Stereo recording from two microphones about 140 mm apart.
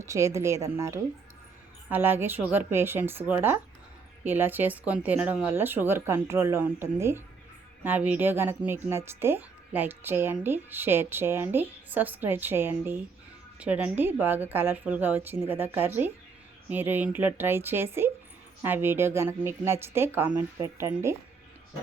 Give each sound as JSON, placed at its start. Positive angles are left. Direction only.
{"t": 0.0, "sound": "a woman's voice", "side_deg": -20}